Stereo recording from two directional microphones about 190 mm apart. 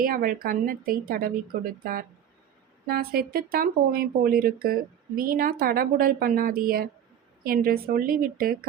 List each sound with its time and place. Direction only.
0.0 s speech: 50° right (ahead or behind)